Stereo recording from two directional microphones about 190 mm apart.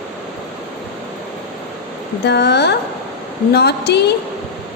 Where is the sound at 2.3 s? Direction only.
60° left (ahead or behind).